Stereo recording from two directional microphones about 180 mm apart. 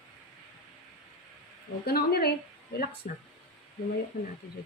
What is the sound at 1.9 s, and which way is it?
A woman's voice, 60° left (ahead or behind).